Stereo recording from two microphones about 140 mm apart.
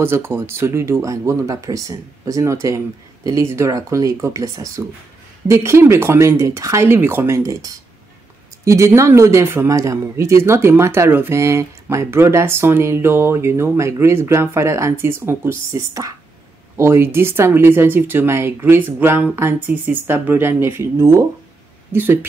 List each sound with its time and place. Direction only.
0.0 s speech: 15° right (ahead or behind)